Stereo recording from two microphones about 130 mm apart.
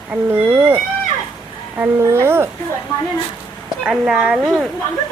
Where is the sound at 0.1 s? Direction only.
15° right (ahead or behind).